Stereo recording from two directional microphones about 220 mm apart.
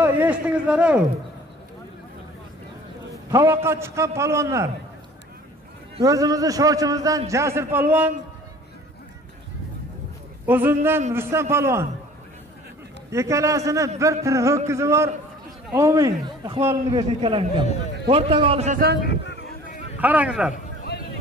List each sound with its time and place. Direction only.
0.0 s a man's voice: 5° right (ahead or behind)
3.3 s a man's voice: 15° right (ahead or behind)
6.0 s a man's voice: 15° right (ahead or behind)
10.4 s a man's voice: 10° right (ahead or behind)
13.1 s a man's voice: 15° right (ahead or behind)
19.0 s a sound: 50° left (ahead or behind)
20.0 s a man's voice: 5° right (ahead or behind)